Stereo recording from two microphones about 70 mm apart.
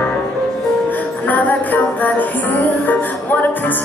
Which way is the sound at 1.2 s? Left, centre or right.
Left.